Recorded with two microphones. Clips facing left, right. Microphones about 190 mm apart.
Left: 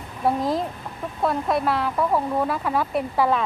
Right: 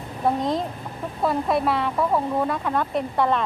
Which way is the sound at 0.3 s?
5° left (ahead or behind).